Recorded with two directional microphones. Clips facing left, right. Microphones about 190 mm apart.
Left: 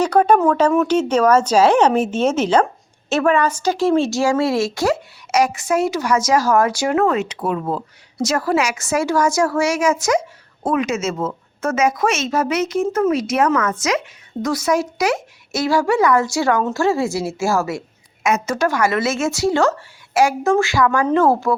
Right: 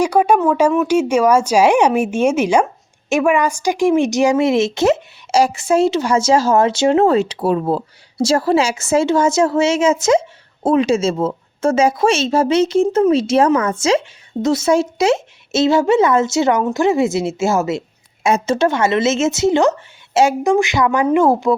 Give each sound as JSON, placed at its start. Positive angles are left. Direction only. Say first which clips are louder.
{"t": 0.0, "sound": "a woman's voice", "louder": "even", "side_deg": -10}